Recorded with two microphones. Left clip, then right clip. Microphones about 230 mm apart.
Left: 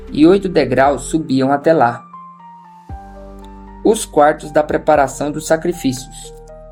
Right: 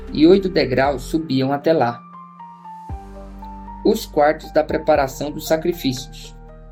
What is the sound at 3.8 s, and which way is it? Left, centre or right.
Speech, left.